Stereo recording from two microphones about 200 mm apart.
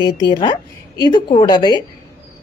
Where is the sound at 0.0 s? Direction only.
20° left (ahead or behind).